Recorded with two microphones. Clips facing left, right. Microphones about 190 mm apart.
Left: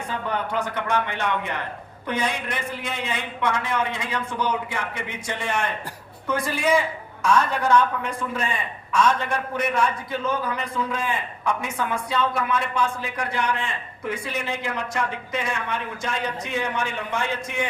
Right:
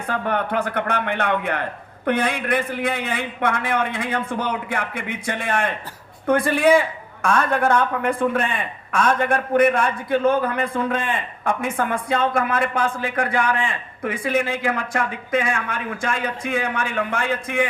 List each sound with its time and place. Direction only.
0.1 s a man's voice: 60° right (ahead or behind)